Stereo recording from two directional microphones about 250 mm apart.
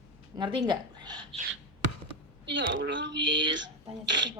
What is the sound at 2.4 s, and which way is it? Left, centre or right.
Speech, right.